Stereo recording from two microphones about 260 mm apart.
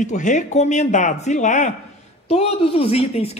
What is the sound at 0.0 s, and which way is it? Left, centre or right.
Speech, left.